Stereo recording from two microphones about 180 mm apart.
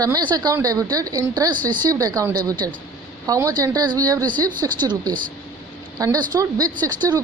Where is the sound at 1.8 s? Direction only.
20° right (ahead or behind).